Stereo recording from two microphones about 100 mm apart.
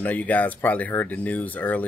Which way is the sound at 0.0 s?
15° left (ahead or behind).